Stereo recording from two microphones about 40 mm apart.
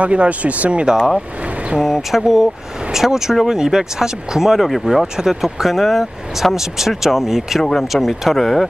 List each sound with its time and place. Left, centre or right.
0.0 s speech: right
1.8 s speech: centre
5.0 s speech: centre
5.3 s speech: centre